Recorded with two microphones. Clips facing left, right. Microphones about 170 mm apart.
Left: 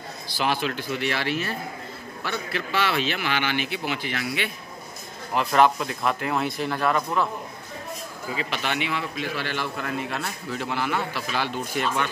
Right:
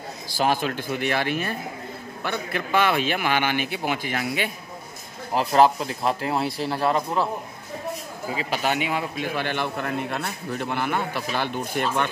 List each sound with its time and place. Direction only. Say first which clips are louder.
0.4 s a man's voice: right 3 dB; 45° right (ahead or behind)
5.3 s speech: right 2 dB; 30° right (ahead or behind)
8.5 s a man's voice: right 5 dB; 40° right (ahead or behind)